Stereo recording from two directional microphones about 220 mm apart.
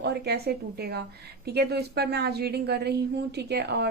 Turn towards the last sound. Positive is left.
turn(degrees=-50)  # may be behind; listen again after turning